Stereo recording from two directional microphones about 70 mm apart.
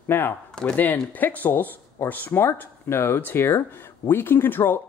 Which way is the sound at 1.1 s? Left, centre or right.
Left.